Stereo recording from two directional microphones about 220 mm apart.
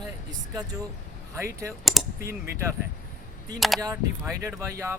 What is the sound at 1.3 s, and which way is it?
Speech, 15° right (ahead or behind).